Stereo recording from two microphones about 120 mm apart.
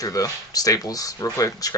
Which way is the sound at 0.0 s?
30° left (ahead or behind).